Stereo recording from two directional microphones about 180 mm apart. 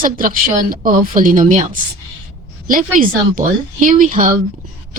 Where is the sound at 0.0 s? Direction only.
50° right (ahead or behind).